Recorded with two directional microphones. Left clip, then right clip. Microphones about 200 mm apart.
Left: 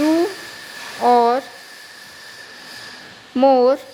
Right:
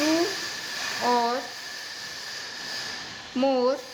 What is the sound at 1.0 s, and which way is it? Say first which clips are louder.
Speech: left 10 dB; 40° left (ahead or behind).